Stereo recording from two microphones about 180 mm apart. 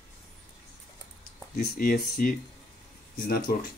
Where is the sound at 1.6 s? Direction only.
55° left (ahead or behind).